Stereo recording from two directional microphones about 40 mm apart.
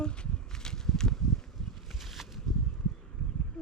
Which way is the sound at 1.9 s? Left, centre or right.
Centre.